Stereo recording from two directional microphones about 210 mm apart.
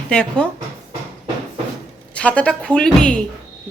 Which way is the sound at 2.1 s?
5° left (ahead or behind).